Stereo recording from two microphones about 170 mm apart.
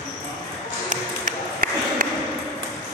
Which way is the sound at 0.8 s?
55° right (ahead or behind).